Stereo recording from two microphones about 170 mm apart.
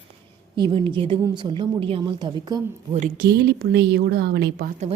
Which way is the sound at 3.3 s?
70° right (ahead or behind).